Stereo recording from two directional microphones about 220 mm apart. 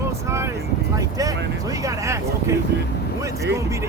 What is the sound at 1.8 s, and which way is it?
Speech, 15° right (ahead or behind).